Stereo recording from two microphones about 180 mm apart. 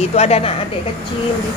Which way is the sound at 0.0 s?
35° left (ahead or behind).